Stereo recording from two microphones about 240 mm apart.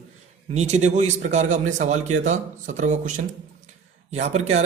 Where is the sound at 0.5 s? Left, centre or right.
Right.